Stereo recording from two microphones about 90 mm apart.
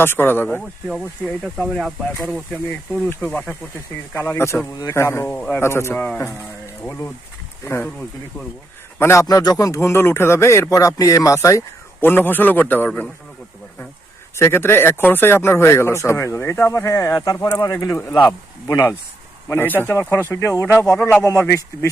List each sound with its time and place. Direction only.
0.0 s speech: 25° left (ahead or behind)
1.4 s speech: centre (ahead or behind)
3.2 s speech: 15° left (ahead or behind)
4.1 s speech: 25° left (ahead or behind)
7.6 s speech: 30° left (ahead or behind)
9.0 s a man's voice: 30° left (ahead or behind)
9.2 s speech: 45° left (ahead or behind)
11.9 s speech: 25° left (ahead or behind)
14.3 s speech: 30° left (ahead or behind)
19.5 s speech: 20° left (ahead or behind)